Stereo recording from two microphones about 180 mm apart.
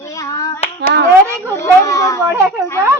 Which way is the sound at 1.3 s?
15° left (ahead or behind).